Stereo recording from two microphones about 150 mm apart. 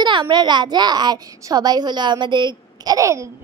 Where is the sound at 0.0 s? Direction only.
30° right (ahead or behind).